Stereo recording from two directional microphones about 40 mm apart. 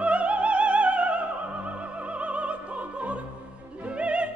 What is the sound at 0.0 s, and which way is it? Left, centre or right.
Opera, right.